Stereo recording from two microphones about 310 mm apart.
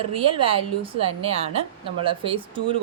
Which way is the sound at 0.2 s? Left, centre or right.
Centre.